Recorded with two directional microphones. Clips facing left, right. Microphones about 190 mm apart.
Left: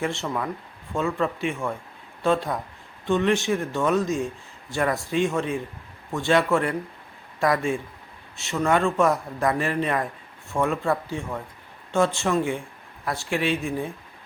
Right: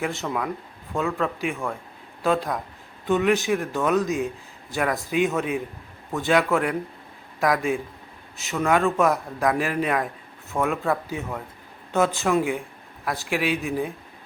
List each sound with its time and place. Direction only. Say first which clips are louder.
0.0 s a man's voice: even; centre (ahead or behind)